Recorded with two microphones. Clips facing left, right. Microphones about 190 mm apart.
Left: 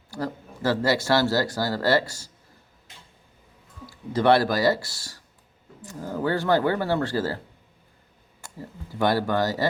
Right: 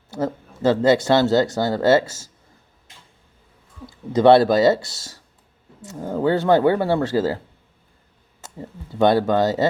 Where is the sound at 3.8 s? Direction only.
20° right (ahead or behind).